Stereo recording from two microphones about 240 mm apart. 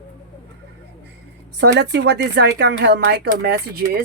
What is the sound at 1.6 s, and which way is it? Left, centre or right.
Speech, right.